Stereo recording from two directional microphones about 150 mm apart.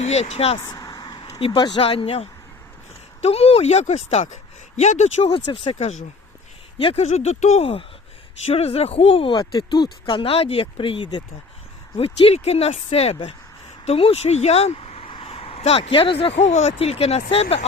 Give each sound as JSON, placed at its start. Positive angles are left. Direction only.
{"t": 0.0, "sound": "speech", "side_deg": 45}
{"t": 0.7, "sound": "speech", "side_deg": 25}
{"t": 5.7, "sound": "speech", "side_deg": 50}